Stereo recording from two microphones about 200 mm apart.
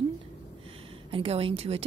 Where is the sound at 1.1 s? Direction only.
25° right (ahead or behind).